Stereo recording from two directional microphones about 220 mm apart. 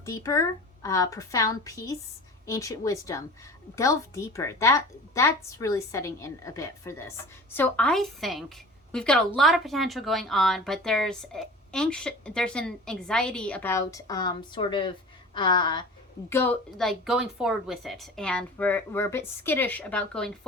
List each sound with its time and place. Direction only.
0.0 s a woman's voice: 15° left (ahead or behind)
16.3 s a woman's voice: 10° left (ahead or behind)